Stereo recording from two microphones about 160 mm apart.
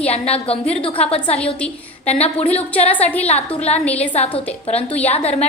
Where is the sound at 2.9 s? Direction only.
10° left (ahead or behind).